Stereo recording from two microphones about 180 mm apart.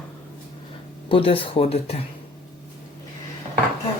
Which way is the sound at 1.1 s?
30° left (ahead or behind).